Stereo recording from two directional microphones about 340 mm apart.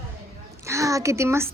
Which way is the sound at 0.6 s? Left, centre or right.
Centre.